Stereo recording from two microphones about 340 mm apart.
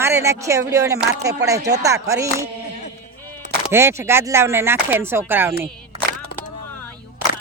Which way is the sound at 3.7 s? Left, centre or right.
Centre.